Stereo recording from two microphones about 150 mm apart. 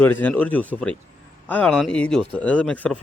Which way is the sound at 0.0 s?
10° left (ahead or behind).